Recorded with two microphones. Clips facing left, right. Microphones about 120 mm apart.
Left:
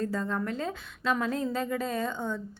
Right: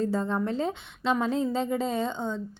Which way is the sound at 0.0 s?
30° right (ahead or behind).